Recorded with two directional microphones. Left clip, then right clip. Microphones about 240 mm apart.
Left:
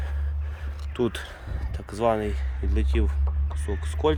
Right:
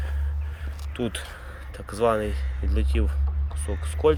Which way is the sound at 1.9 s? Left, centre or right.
Centre.